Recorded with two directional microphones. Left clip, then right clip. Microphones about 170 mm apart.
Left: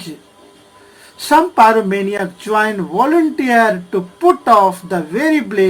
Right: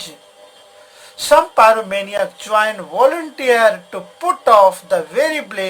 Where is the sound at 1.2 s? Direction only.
25° right (ahead or behind).